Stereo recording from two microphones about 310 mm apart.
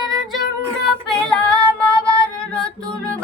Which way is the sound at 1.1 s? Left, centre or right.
Centre.